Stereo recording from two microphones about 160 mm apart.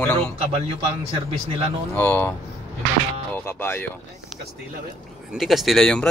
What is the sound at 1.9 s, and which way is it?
Speech, 15° left (ahead or behind).